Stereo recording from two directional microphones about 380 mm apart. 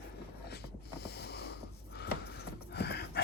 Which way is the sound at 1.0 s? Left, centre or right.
Left.